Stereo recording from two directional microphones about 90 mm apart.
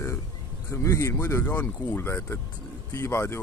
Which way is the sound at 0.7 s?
35° left (ahead or behind).